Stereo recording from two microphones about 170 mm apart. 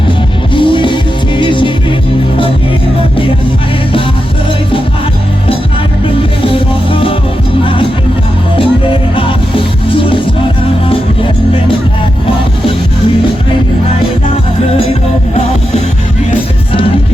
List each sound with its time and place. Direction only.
0.5 s music: 30° left (ahead or behind)
6.4 s music: 30° left (ahead or behind)